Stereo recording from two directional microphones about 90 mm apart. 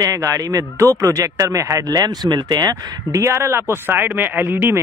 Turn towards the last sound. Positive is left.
turn(degrees=-25)  # may be behind; listen again after turning